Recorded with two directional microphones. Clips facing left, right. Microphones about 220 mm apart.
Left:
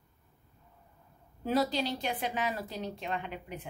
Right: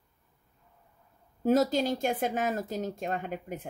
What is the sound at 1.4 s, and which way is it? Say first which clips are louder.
Speech: right 5 dB; 45° right (ahead or behind).